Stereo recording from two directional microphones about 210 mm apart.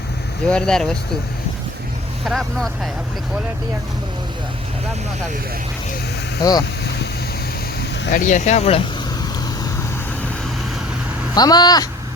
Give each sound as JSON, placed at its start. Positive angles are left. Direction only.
{"t": 0.4, "sound": "speech", "side_deg": 5}
{"t": 2.2, "sound": "speech", "side_deg": 0}
{"t": 6.4, "sound": "speech", "side_deg": 20}
{"t": 7.8, "sound": "speech", "side_deg": 45}
{"t": 11.3, "sound": "speech", "side_deg": 20}